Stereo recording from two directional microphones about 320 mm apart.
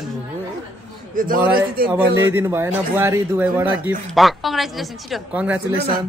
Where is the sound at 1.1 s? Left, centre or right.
Right.